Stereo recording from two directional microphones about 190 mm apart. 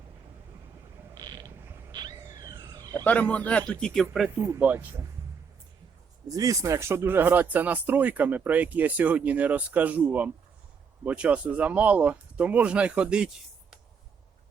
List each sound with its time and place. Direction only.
1.1 s mechanisms: 20° right (ahead or behind)
1.6 s a sound: 20° right (ahead or behind)
2.9 s a man's voice: 10° left (ahead or behind)
4.0 s speech: 5° right (ahead or behind)
6.2 s speech: 20° right (ahead or behind)